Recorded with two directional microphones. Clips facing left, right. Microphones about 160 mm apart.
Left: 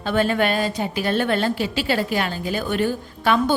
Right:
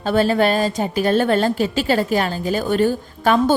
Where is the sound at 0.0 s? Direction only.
40° right (ahead or behind).